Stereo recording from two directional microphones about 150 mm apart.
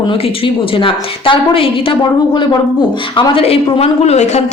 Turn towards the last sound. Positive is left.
turn(degrees=50)  # may be behind; listen again after turning